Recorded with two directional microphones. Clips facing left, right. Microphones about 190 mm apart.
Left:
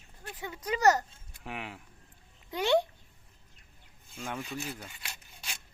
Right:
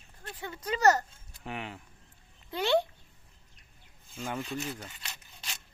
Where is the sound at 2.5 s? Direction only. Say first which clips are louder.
Left 1 dB; 15° left (ahead or behind).